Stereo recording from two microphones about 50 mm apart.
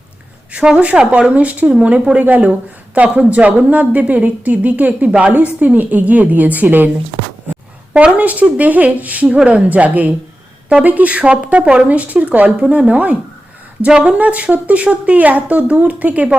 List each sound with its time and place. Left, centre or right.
0.9 s a woman's voice: right
7.9 s a woman's voice: right